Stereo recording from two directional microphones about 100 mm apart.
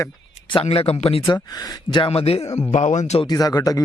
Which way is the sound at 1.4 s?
40° left (ahead or behind).